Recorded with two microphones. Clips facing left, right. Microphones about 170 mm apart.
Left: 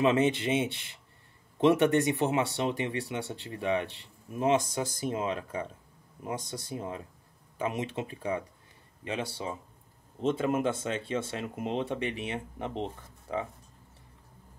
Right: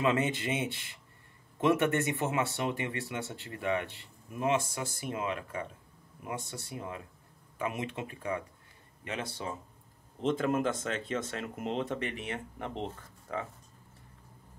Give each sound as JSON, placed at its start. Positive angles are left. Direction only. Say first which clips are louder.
{"t": 0.0, "sound": "speech", "louder": "left 4 dB", "side_deg": 25}